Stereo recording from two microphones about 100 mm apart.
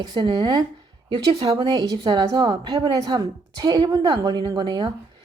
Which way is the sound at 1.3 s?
65° right (ahead or behind).